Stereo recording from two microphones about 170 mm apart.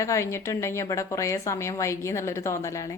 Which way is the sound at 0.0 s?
15° left (ahead or behind).